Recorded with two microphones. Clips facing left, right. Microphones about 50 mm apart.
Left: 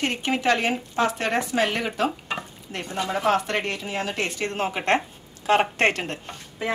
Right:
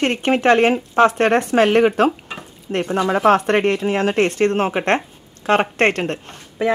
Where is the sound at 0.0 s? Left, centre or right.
Right.